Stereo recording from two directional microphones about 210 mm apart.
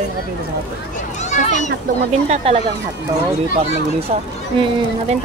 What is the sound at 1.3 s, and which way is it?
Speech, 35° left (ahead or behind).